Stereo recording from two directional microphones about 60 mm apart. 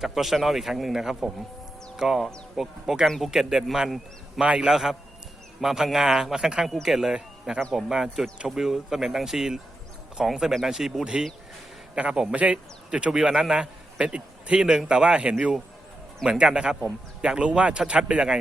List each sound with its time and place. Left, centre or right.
0.0 s a man's voice: centre
4.4 s a man's voice: centre